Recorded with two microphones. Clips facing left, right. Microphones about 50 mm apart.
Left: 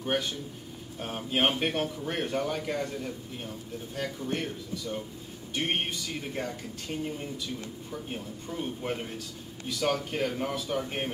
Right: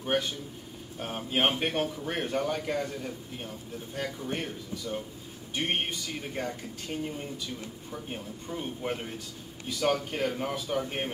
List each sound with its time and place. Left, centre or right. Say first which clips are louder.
0.0 s a man's voice: right 1 dB; centre